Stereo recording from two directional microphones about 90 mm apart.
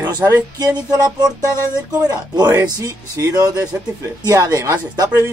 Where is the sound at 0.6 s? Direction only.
45° right (ahead or behind).